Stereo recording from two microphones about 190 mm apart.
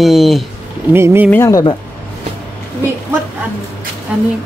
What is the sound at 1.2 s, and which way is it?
Speech, 15° left (ahead or behind).